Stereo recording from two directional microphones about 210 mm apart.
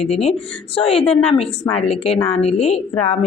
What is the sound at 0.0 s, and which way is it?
A woman's voice, 30° left (ahead or behind).